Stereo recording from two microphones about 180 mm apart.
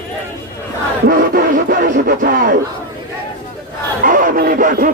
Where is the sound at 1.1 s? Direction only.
50° right (ahead or behind).